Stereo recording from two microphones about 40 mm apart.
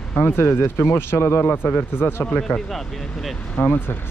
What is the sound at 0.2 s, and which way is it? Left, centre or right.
Speech, left.